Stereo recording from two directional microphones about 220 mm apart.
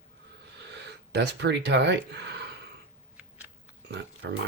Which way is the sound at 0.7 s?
50° right (ahead or behind).